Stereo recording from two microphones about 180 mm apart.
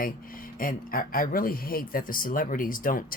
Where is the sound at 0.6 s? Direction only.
50° left (ahead or behind).